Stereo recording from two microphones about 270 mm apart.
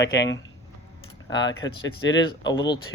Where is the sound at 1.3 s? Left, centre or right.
Centre.